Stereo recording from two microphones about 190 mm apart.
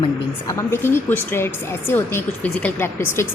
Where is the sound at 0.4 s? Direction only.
15° left (ahead or behind).